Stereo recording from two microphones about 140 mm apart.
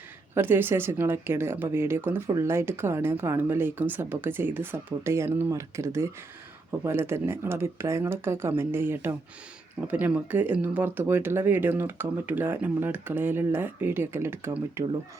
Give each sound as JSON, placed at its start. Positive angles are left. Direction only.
{"t": 0.3, "sound": "speech", "side_deg": -15}